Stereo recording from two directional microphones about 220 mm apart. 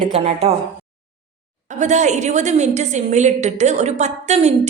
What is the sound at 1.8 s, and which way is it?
A woman's voice, 35° right (ahead or behind).